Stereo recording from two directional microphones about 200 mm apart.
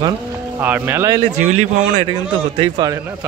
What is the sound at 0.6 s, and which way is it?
Speech, 10° right (ahead or behind).